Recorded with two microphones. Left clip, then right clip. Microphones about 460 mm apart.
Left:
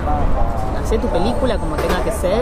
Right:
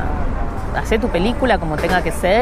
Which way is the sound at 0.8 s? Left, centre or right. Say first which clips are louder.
Right 1 dB; right.